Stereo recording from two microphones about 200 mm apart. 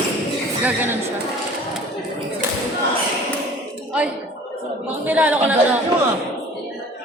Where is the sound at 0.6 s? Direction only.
10° right (ahead or behind).